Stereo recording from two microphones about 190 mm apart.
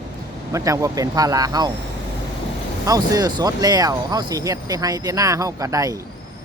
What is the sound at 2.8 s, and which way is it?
Speech, 20° right (ahead or behind).